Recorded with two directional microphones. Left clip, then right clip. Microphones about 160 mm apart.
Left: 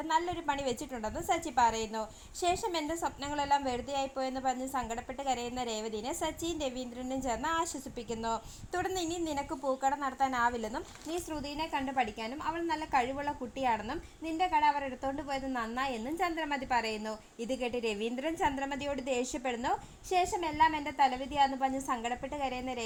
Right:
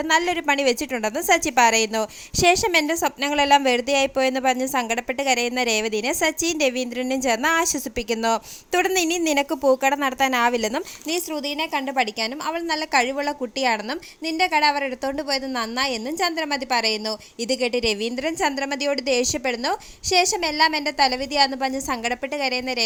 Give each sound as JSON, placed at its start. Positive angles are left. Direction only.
{"t": 0.2, "sound": "a woman's voice", "side_deg": -45}
{"t": 8.2, "sound": "a woman's voice", "side_deg": -45}
{"t": 12.2, "sound": "a woman's voice", "side_deg": -40}
{"t": 15.5, "sound": "a woman's voice", "side_deg": -30}